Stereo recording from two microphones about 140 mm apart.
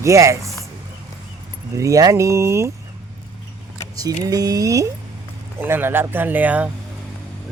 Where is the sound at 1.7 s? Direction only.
25° right (ahead or behind).